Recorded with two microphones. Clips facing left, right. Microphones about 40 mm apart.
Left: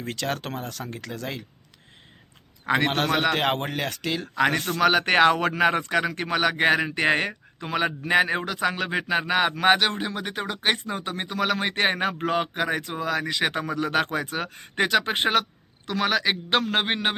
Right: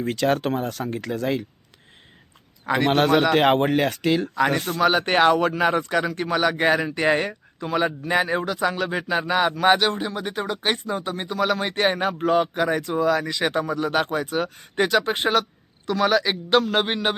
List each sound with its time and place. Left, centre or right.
0.0 s speech: centre
2.9 s speech: centre
4.5 s speech: centre
4.8 s speech: left
12.5 s speech: left
13.4 s a man's voice: left